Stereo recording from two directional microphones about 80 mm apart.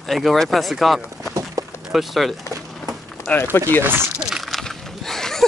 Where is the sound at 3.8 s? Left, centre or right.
Right.